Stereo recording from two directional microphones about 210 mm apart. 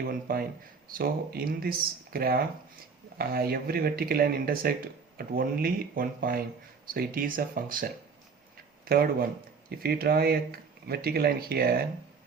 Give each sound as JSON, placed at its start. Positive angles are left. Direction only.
{"t": 0.0, "sound": "speech", "side_deg": -45}